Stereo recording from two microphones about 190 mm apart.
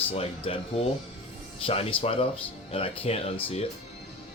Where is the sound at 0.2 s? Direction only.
30° left (ahead or behind).